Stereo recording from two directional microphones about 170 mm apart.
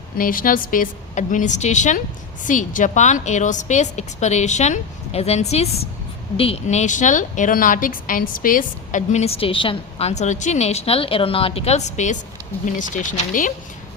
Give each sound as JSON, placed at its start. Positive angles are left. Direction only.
{"t": 0.2, "sound": "a woman's voice", "side_deg": 55}